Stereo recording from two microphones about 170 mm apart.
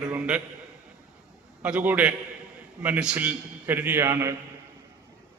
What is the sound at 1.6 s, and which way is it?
A man's voice, 10° right (ahead or behind).